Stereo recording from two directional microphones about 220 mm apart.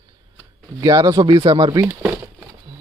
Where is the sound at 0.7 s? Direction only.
20° right (ahead or behind).